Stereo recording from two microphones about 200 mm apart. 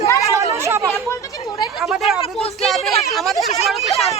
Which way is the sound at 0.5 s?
15° right (ahead or behind).